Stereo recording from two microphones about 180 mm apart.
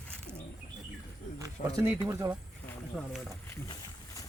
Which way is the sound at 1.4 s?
20° right (ahead or behind).